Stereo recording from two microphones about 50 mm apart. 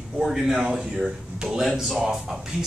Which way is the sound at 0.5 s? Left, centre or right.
Centre.